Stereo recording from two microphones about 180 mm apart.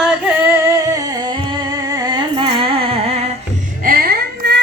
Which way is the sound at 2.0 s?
25° right (ahead or behind).